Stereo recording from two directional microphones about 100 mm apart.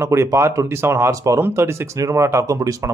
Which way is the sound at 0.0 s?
30° right (ahead or behind).